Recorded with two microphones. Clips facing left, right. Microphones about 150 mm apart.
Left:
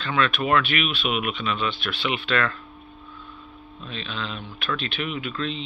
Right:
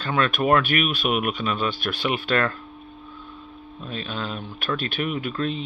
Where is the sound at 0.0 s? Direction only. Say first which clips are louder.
Right 2 dB; 40° right (ahead or behind).